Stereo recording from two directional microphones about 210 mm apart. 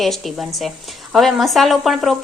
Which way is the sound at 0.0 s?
Centre (ahead or behind).